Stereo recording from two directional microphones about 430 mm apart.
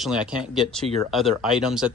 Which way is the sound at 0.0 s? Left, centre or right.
Centre.